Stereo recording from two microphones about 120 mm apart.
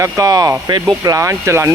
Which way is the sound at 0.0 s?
30° right (ahead or behind).